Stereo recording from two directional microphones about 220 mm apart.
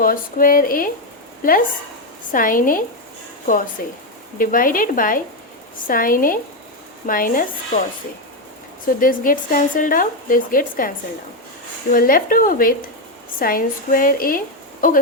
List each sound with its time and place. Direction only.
0.0 s a woman's voice: 40° left (ahead or behind)
8.9 s a woman's voice: 40° left (ahead or behind)